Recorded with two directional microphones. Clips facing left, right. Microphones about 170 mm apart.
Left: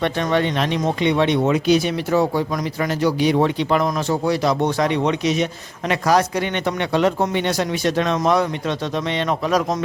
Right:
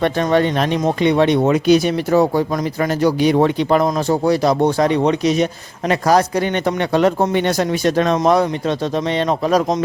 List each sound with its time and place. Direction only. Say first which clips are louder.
0.0 s speech: right 4 dB; 40° right (ahead or behind)